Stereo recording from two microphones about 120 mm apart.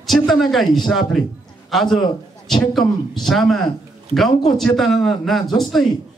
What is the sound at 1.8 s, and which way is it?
Speech, 40° left (ahead or behind).